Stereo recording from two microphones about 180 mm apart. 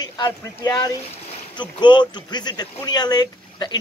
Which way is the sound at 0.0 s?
20° left (ahead or behind).